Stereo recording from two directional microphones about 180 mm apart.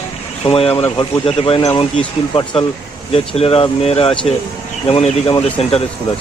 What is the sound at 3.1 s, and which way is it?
Speech, 30° left (ahead or behind).